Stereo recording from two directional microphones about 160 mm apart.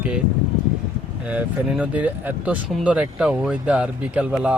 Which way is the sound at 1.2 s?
10° right (ahead or behind).